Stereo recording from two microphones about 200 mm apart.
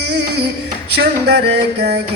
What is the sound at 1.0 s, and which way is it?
Music, 55° right (ahead or behind).